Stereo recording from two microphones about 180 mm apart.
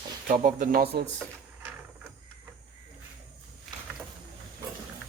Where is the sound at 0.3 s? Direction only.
50° right (ahead or behind).